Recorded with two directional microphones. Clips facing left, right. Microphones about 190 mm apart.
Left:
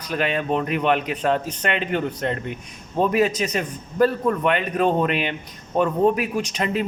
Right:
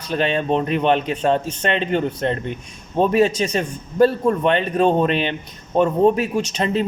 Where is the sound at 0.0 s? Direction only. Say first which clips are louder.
Right 3 dB; 30° right (ahead or behind).